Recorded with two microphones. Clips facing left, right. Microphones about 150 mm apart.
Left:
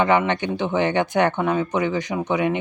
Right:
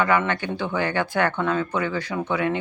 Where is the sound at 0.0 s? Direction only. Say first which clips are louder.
Left 3 dB; 20° left (ahead or behind).